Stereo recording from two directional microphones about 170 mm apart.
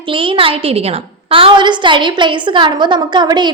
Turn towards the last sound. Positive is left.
turn(degrees=-25)  # may be behind; listen again after turning